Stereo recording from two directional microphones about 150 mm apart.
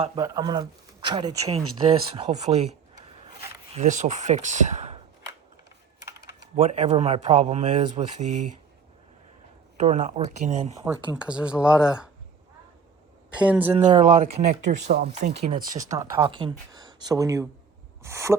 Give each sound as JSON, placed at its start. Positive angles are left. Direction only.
{"t": 0.2, "sound": "speech", "side_deg": -25}
{"t": 3.8, "sound": "speech", "side_deg": -55}
{"t": 6.0, "sound": "typing", "side_deg": -20}
{"t": 6.6, "sound": "speech", "side_deg": -45}
{"t": 9.7, "sound": "speech", "side_deg": -50}
{"t": 10.8, "sound": "speech", "side_deg": -10}
{"t": 13.4, "sound": "speech", "side_deg": -10}
{"t": 13.8, "sound": "speech", "side_deg": -55}
{"t": 15.5, "sound": "speech", "side_deg": -25}
{"t": 16.2, "sound": "speech", "side_deg": -35}